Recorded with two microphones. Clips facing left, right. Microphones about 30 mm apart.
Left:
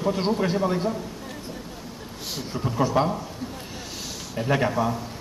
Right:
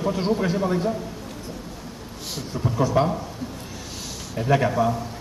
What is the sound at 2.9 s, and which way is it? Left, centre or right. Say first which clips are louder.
Speech: right 2 dB; centre.